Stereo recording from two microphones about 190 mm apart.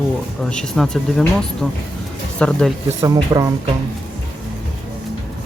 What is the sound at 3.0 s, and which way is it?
Speech, 15° right (ahead or behind).